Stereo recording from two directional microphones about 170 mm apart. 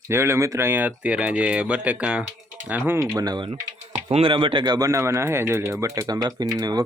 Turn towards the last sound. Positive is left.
turn(degrees=-20)  # may be behind; listen again after turning